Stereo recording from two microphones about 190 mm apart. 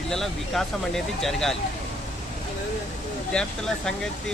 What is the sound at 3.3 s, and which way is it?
Speech, 5° left (ahead or behind).